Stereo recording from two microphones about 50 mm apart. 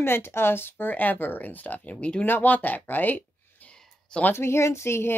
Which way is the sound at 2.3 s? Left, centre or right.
Left.